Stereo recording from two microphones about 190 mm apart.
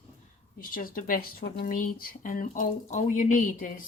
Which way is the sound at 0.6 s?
50° left (ahead or behind).